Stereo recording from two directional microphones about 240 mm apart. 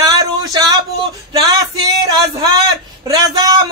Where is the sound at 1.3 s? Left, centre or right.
Centre.